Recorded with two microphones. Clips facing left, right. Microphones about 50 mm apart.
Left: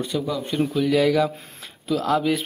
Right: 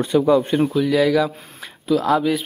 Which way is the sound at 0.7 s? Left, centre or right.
Centre.